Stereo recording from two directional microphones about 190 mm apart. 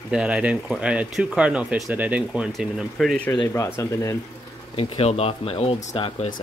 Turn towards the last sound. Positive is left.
turn(degrees=30)  # may be behind; listen again after turning